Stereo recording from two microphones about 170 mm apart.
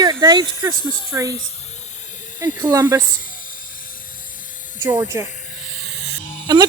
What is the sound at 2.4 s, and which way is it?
Speech, 20° right (ahead or behind).